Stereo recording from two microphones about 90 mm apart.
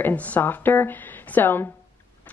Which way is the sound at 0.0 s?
15° left (ahead or behind).